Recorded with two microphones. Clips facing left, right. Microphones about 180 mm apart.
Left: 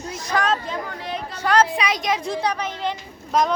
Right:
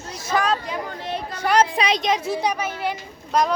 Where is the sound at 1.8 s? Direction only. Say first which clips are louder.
Right 2 dB; 25° right (ahead or behind).